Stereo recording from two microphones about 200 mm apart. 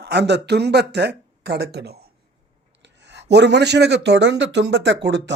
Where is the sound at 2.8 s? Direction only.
60° right (ahead or behind).